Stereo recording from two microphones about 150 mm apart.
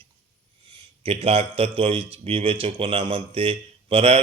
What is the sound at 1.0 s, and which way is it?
A man's voice, 40° right (ahead or behind).